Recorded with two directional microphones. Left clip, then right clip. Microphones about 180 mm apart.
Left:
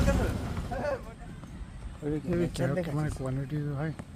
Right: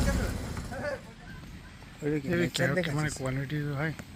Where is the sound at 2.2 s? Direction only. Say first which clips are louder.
Right 2 dB; 5° left (ahead or behind); by 3.9 s 10° right (ahead or behind).